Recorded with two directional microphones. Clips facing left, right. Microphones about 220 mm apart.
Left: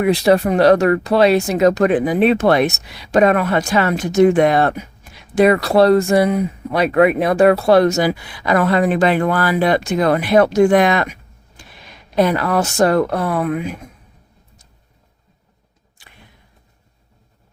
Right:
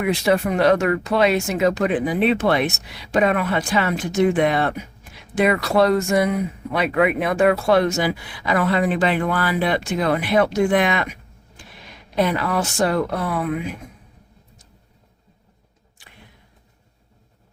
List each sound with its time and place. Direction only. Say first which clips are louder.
0.0 s speech: left 5 dB; 35° left (ahead or behind)
12.1 s speech: left 5 dB; 40° left (ahead or behind)